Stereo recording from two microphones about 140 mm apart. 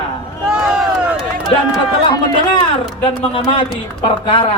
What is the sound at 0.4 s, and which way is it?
Crowd, centre (ahead or behind).